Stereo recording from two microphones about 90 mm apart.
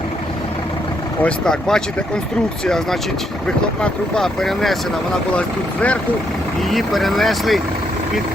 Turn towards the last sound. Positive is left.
turn(degrees=0)  # may be behind; listen again after turning